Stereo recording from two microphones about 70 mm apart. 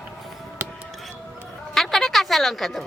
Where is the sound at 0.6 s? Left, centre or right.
Right.